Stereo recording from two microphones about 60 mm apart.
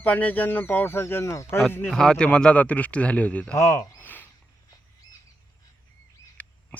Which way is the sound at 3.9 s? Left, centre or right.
Left.